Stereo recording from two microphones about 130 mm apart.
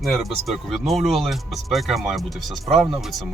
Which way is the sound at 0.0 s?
Centre (ahead or behind).